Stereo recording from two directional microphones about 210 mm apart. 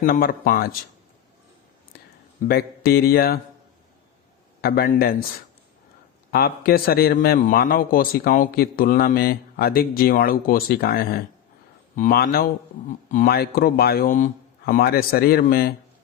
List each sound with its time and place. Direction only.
0.0 s a man's voice: 45° left (ahead or behind)
2.4 s a man's voice: 45° left (ahead or behind)
4.6 s a man's voice: 45° left (ahead or behind)
6.3 s a man's voice: 45° left (ahead or behind)
12.9 s a man's voice: 40° left (ahead or behind)